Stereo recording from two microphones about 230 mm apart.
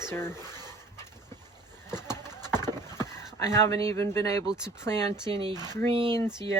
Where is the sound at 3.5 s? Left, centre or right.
Centre.